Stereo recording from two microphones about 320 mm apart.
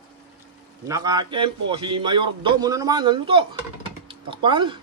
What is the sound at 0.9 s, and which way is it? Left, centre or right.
A man's voice, centre.